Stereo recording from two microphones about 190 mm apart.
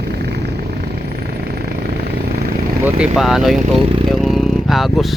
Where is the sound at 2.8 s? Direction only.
5° right (ahead or behind).